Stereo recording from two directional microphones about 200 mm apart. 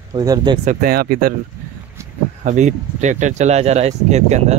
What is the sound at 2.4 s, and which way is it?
Speech, 35° right (ahead or behind).